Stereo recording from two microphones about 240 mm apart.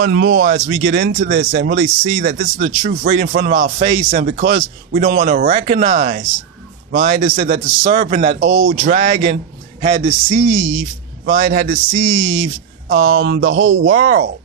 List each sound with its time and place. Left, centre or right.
0.0 s speech: right
0.7 s a man's voice: right
0.9 s speech: right
8.4 s a man's voice: right
11.2 s speech: right
12.0 s speech: right
12.9 s speech: right
13.9 s speech: right